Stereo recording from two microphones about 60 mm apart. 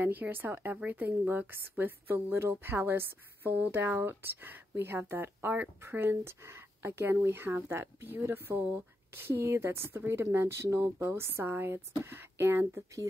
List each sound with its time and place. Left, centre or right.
0.0 s a woman's voice: right